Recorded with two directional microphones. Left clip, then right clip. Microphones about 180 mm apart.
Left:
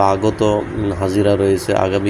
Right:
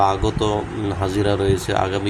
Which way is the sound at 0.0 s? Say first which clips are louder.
Left 4 dB; 10° left (ahead or behind).